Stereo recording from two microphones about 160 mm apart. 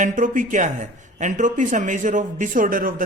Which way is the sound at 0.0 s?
55° right (ahead or behind).